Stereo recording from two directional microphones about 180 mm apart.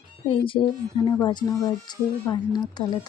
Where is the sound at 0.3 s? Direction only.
30° left (ahead or behind).